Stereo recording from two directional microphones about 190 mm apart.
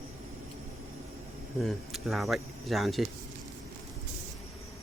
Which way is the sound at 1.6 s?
Centre (ahead or behind).